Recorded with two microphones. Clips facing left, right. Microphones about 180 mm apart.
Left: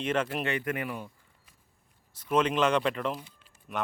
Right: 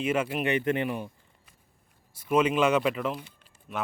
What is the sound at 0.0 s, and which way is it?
Speech, 10° right (ahead or behind).